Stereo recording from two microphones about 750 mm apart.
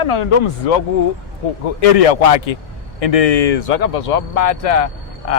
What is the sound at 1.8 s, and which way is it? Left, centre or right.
Speech, left.